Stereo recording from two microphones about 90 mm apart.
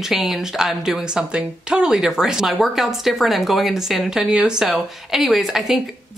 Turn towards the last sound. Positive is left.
turn(degrees=-5)  # may be behind; listen again after turning